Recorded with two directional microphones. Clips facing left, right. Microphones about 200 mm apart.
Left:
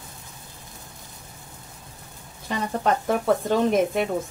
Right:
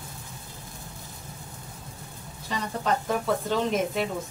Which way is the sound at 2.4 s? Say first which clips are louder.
Left 5 dB; 55° left (ahead or behind).